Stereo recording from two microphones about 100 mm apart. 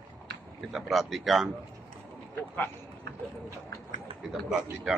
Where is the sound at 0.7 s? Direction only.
Centre (ahead or behind).